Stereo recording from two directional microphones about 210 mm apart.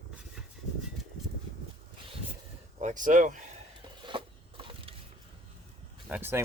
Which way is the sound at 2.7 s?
35° right (ahead or behind).